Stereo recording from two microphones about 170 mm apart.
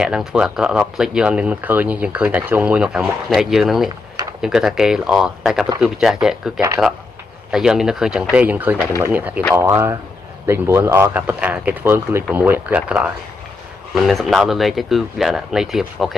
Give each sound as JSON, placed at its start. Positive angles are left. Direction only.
{"t": 0.0, "sound": "speech", "side_deg": -5}